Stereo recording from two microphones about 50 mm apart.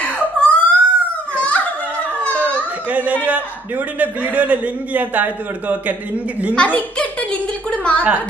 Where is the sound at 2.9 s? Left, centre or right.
Right.